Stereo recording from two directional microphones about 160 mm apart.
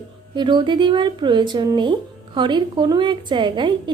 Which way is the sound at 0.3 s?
30° right (ahead or behind).